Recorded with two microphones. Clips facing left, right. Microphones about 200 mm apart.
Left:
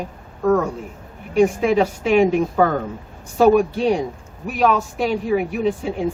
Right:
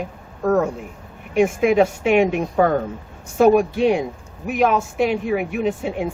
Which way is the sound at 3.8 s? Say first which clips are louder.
Right 1 dB; 35° left (ahead or behind).